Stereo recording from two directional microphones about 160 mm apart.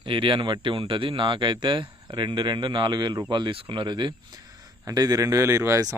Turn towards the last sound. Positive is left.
turn(degrees=-20)  # may be behind; listen again after turning